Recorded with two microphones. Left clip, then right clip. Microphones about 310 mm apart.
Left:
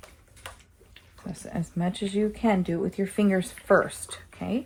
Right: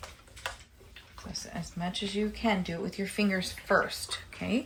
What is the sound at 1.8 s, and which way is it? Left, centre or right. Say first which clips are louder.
Speech: left 5 dB; centre.